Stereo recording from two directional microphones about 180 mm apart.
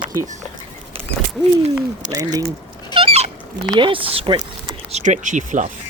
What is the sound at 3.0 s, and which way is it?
Fowl, 35° right (ahead or behind).